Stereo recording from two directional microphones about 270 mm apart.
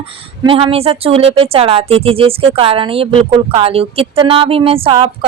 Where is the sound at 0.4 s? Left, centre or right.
Right.